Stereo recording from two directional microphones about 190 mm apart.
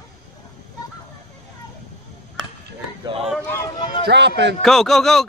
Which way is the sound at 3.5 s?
15° left (ahead or behind).